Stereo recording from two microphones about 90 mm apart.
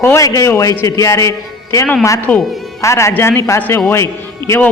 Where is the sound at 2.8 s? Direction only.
30° left (ahead or behind).